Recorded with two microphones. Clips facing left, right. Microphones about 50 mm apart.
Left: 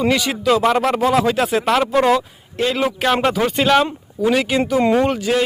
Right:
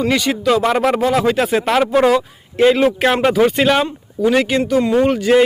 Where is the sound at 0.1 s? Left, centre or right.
Centre.